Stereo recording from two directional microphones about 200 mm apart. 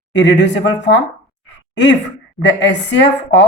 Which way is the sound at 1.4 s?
60° left (ahead or behind).